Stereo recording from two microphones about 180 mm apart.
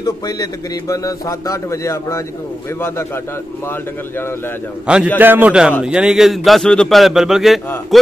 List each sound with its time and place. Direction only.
0.0 s a man's voice: 20° left (ahead or behind)
4.8 s a man's voice: 5° right (ahead or behind)